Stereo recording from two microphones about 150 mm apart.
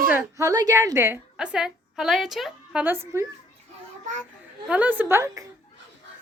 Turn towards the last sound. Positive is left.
turn(degrees=-20)  # may be behind; listen again after turning